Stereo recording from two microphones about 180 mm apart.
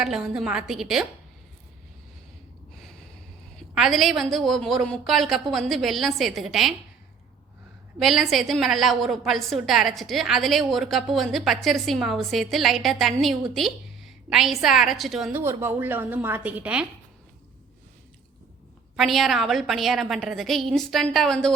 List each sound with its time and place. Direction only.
0.0 s a woman's voice: 5° right (ahead or behind)
3.8 s a woman's voice: centre (ahead or behind)
7.9 s a woman's voice: centre (ahead or behind)
18.9 s a woman's voice: centre (ahead or behind)